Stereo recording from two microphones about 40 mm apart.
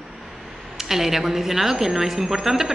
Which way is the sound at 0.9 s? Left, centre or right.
Centre.